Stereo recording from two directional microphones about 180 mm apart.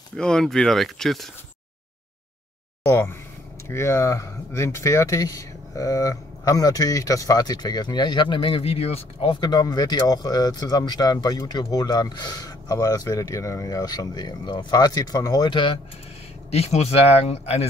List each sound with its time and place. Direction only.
0.1 s speech: 5° left (ahead or behind)
2.9 s speech: 15° left (ahead or behind); by 17.6 s 35° left (ahead or behind)